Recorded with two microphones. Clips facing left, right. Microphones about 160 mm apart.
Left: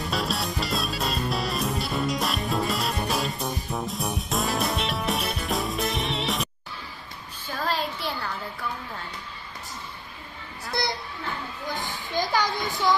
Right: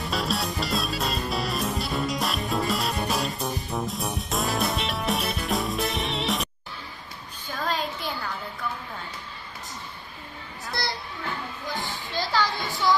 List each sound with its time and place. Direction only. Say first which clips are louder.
0.1 s music: right 1 dB; centre (ahead or behind)
7.6 s a sound: left 1 dB; 5° left (ahead or behind)
10.7 s children playing: left 3 dB; 20° left (ahead or behind)
11.7 s music: left 2 dB; 20° left (ahead or behind)